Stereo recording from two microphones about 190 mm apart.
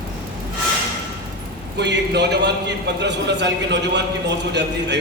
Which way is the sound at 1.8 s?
65° right (ahead or behind).